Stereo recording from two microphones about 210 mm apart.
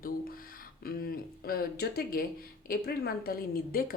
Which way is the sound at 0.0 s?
45° left (ahead or behind).